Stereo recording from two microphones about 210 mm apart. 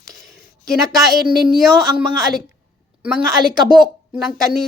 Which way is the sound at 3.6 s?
20° right (ahead or behind).